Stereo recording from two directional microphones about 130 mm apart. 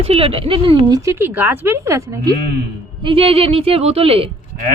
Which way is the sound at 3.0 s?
45° right (ahead or behind).